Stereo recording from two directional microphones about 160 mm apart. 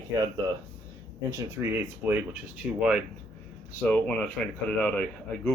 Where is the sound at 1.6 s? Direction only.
15° right (ahead or behind).